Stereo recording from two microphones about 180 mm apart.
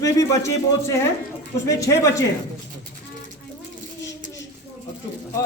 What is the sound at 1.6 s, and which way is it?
Speech, 15° left (ahead or behind).